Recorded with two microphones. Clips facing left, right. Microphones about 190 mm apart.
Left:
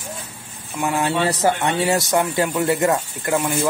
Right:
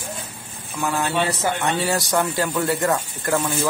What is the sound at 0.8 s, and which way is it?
Speech, 20° left (ahead or behind).